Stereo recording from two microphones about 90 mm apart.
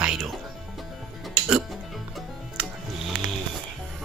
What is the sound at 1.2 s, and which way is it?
Music, 5° right (ahead or behind).